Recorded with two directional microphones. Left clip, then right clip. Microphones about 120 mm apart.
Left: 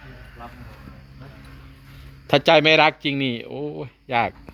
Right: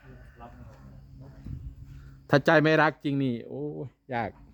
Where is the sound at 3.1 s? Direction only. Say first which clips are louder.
Left 6 dB; 85° right; by 3.7 s 55° right (ahead or behind).